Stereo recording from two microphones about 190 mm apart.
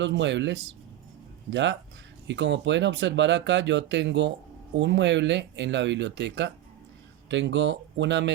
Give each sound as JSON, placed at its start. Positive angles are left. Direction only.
{"t": 0.0, "sound": "speech", "side_deg": -70}